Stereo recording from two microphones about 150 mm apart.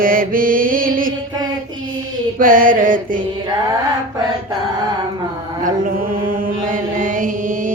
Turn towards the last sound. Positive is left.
turn(degrees=-60)  # may be behind; listen again after turning